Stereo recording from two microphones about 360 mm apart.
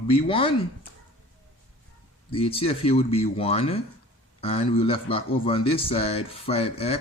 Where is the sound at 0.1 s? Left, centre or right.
Centre.